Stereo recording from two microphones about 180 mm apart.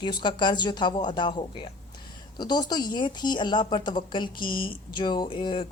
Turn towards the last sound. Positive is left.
turn(degrees=30)  # may be behind; listen again after turning